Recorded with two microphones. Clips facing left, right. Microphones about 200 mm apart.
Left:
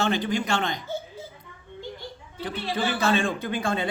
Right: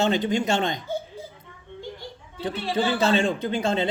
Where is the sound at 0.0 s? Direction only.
20° right (ahead or behind).